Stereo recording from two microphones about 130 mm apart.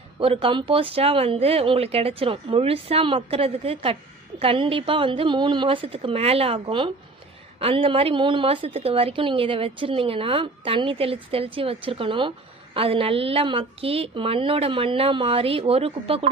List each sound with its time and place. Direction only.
0.2 s a woman's voice: 45° right (ahead or behind)